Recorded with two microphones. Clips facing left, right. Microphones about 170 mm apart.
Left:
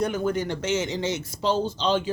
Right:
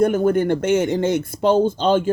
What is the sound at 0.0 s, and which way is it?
Speech, 50° right (ahead or behind).